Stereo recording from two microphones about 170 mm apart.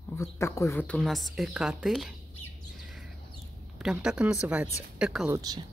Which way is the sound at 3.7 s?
5° right (ahead or behind).